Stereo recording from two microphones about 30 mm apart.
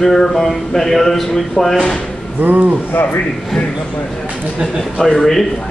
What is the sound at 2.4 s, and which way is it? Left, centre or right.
Speech, right.